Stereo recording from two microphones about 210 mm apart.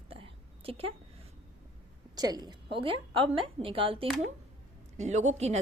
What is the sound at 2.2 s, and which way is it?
A woman's voice, 20° right (ahead or behind).